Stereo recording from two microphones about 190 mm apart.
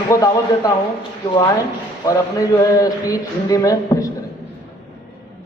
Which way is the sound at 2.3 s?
20° left (ahead or behind).